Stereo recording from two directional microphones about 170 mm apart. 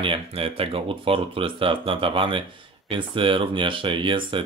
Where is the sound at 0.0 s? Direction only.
30° right (ahead or behind).